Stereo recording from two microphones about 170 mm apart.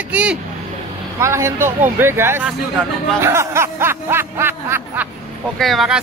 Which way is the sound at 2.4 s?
5° right (ahead or behind).